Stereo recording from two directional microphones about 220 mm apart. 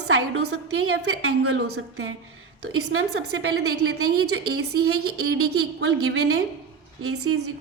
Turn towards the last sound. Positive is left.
turn(degrees=-90)